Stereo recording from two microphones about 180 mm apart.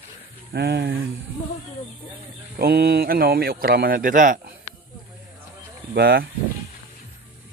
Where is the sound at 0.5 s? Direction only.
65° right (ahead or behind).